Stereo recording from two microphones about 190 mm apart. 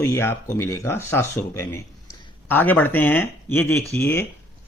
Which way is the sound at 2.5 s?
10° left (ahead or behind).